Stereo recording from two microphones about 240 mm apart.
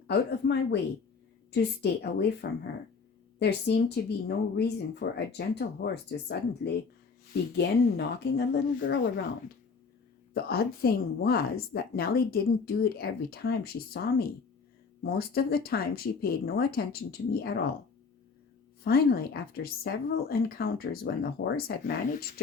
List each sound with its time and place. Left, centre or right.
0.1 s speech: left
10.3 s a woman's voice: left
18.9 s a woman's voice: left